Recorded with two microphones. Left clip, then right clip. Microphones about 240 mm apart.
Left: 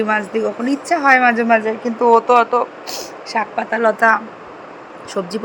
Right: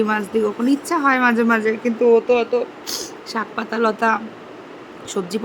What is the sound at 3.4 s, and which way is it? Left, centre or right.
Speech, right.